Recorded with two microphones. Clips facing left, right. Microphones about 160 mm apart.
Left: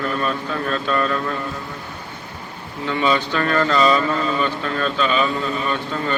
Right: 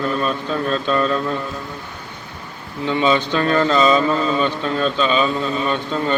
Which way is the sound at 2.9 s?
20° right (ahead or behind).